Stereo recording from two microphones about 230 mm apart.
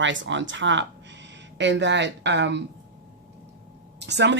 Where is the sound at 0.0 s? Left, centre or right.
Right.